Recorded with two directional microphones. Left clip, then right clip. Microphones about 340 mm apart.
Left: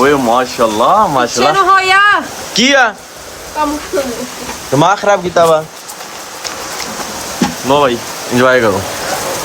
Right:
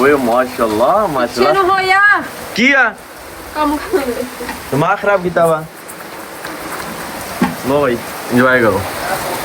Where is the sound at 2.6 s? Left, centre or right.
Centre.